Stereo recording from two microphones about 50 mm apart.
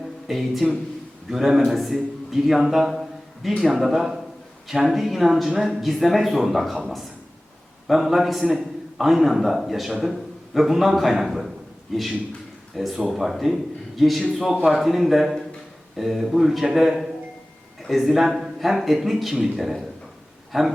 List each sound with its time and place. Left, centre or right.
0.3 s a man's voice: centre
7.9 s a man's voice: centre